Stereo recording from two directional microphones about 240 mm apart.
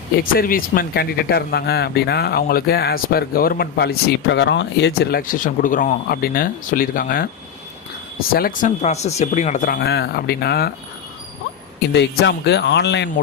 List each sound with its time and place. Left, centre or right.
0.2 s speech: left
8.3 s speech: left
11.9 s speech: left